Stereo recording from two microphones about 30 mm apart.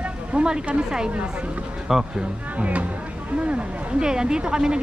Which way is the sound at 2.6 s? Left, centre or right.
Right.